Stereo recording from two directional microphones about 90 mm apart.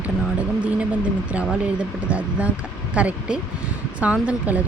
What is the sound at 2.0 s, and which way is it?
Speech, 15° right (ahead or behind).